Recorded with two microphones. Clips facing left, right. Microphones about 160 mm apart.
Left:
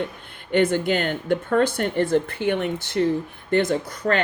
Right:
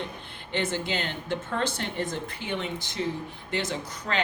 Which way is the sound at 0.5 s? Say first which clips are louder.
Left 9 dB; 55° left (ahead or behind).